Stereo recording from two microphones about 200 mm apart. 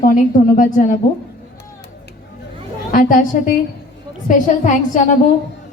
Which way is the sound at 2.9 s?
40° left (ahead or behind).